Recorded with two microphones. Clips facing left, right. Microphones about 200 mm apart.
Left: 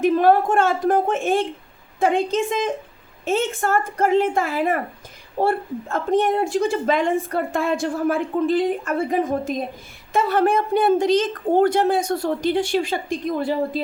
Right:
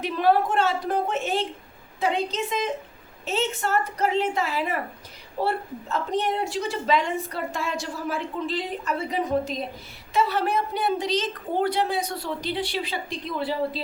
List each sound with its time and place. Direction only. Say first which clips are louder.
0.0 s a woman's voice: left 6 dB; 50° left (ahead or behind)